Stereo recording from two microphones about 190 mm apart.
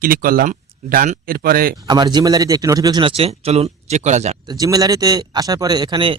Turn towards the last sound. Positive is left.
turn(degrees=-25)  # may be behind; listen again after turning